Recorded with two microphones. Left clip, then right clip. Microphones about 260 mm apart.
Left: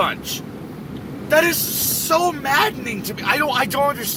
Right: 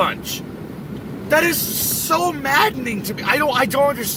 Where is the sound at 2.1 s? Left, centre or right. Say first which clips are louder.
Even; centre.